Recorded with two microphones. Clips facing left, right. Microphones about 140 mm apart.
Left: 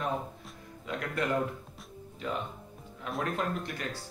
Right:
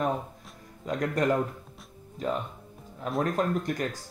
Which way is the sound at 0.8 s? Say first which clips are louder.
Right 6 dB; 40° right (ahead or behind).